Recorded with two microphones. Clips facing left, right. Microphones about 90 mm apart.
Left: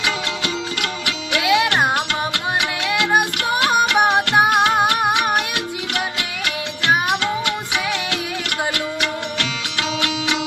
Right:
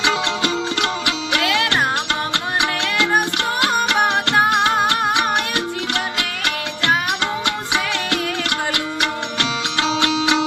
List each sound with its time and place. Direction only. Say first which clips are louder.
0.0 s music: right 4 dB; 30° right (ahead or behind)
1.4 s music: left 4 dB; 15° left (ahead or behind)
7.2 s music: even; 30° right (ahead or behind)